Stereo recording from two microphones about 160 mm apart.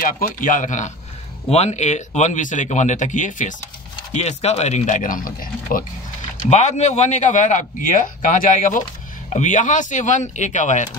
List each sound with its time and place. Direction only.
0.0 s a man's voice: 55° left (ahead or behind)
6.4 s a man's voice: 45° left (ahead or behind)